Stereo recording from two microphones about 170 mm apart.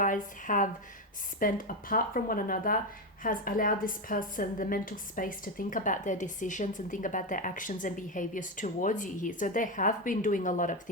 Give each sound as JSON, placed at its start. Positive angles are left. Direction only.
{"t": 0.0, "sound": "a woman's voice", "side_deg": 50}